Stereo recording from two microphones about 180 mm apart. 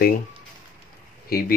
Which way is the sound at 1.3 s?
55° left (ahead or behind).